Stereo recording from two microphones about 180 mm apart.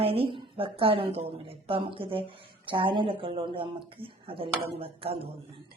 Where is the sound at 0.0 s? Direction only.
30° right (ahead or behind).